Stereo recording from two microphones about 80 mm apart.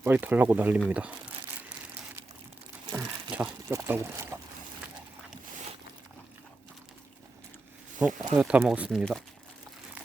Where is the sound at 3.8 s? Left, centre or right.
Right.